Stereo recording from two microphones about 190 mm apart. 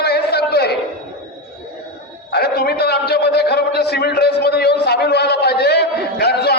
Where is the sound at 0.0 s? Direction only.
60° left (ahead or behind).